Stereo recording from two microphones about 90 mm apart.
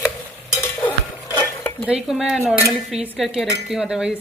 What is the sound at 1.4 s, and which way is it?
Stir, 20° left (ahead or behind).